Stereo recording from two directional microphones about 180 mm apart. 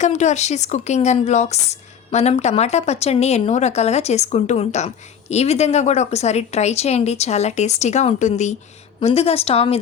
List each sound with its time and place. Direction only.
0.0 s speech: 40° left (ahead or behind)